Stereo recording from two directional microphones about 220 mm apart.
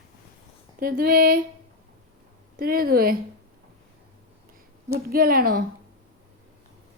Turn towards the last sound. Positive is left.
turn(degrees=-40)  # may be behind; listen again after turning